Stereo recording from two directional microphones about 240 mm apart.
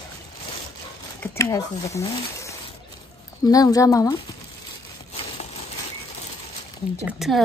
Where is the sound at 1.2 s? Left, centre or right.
Centre.